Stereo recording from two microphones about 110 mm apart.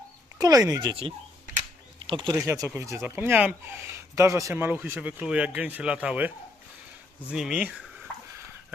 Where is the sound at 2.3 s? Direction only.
30° right (ahead or behind); by 3.6 s 15° right (ahead or behind).